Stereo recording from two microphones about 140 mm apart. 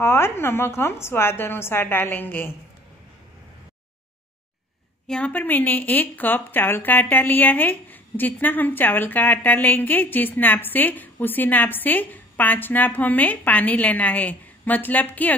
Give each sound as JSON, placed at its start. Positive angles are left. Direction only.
{"t": 0.0, "sound": "a woman's voice", "side_deg": 15}
{"t": 5.0, "sound": "a woman's voice", "side_deg": 5}